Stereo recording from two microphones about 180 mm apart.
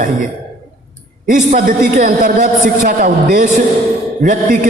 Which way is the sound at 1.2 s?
50° right (ahead or behind).